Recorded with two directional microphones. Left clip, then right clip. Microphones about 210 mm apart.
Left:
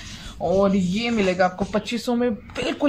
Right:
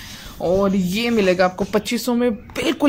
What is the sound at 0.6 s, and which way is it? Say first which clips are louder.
Speech: right 1 dB; 40° right (ahead or behind).